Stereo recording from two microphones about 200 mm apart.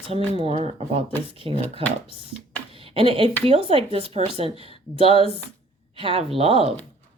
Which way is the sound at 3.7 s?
30° right (ahead or behind).